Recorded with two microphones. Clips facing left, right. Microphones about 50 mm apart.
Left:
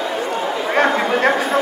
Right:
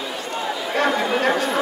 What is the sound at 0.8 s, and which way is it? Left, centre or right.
Chatter, left.